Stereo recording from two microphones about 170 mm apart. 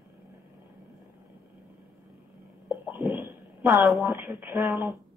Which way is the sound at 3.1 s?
15° right (ahead or behind).